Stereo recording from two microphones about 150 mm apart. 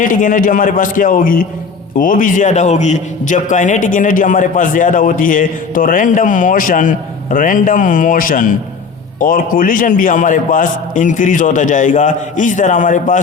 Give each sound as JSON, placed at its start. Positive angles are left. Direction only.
{"t": 0.0, "sound": "a man's voice", "side_deg": 65}